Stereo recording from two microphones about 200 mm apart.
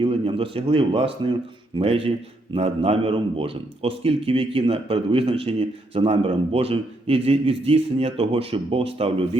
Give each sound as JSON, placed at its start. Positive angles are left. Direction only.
{"t": 0.0, "sound": "a man's voice", "side_deg": -30}